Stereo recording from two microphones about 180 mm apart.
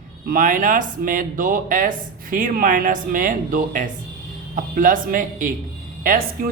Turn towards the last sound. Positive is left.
turn(degrees=-55)  # may be behind; listen again after turning